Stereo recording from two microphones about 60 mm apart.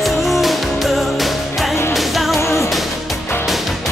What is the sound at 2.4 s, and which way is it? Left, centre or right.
Music, left.